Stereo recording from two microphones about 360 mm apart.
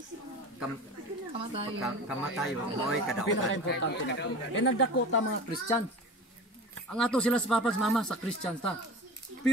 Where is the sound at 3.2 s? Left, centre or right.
Left.